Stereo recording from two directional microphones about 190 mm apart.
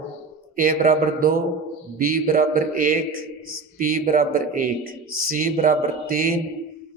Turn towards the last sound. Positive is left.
turn(degrees=-45)  # may be behind; listen again after turning